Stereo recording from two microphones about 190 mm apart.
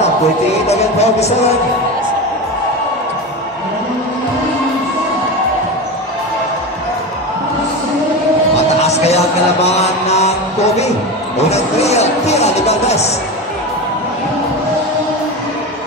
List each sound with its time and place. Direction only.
0.7 s speech: 35° left (ahead or behind)
8.5 s music: 35° left (ahead or behind)
11.3 s speech: 35° left (ahead or behind)